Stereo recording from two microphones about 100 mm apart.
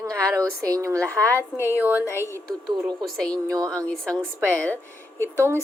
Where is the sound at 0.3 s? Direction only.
35° right (ahead or behind).